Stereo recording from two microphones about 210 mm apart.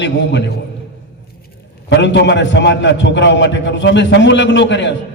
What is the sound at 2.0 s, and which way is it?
A man's voice, 55° left (ahead or behind).